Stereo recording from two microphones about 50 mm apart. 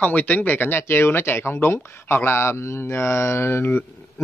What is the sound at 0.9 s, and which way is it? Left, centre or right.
Speech, left.